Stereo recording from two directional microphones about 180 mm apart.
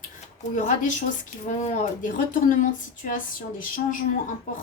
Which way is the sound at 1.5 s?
40° left (ahead or behind).